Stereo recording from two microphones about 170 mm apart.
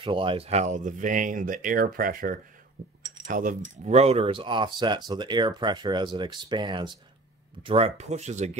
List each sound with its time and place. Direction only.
0.0 s speech: 30° right (ahead or behind)